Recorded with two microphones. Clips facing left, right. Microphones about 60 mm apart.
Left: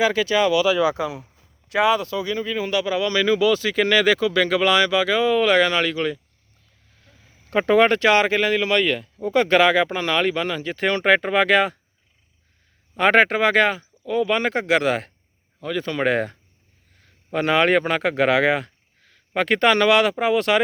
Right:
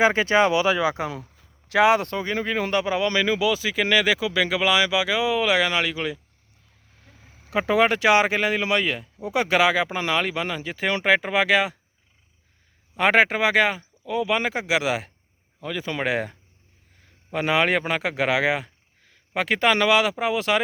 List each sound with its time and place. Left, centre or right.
0.0 s speech: right
1.0 s speech: right
2.7 s speech: right
3.2 s speech: centre
7.5 s speech: centre
12.9 s speech: centre